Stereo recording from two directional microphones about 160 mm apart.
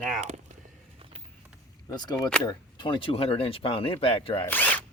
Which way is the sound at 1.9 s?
25° left (ahead or behind).